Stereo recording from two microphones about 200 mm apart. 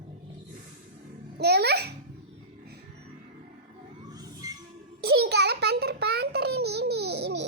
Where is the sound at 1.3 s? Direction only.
55° right (ahead or behind).